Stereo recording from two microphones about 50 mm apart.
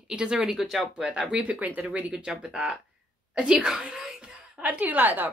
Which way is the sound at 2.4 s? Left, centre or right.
Centre.